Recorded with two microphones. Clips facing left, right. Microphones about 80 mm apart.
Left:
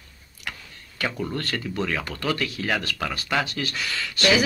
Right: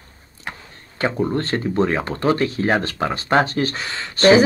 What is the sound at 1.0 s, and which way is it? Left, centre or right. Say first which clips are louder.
Speech: right 7 dB; right.